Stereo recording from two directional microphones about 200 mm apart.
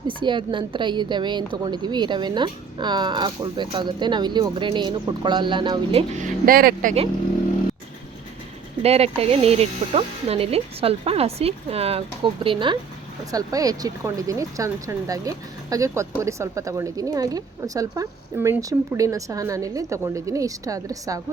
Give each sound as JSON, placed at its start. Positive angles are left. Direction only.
{"t": 0.1, "sound": "speech", "side_deg": -25}
{"t": 8.8, "sound": "speech", "side_deg": -30}